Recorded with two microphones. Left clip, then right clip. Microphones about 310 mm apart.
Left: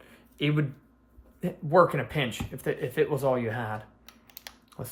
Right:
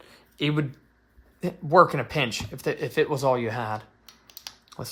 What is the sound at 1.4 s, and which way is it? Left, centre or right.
Speech, right.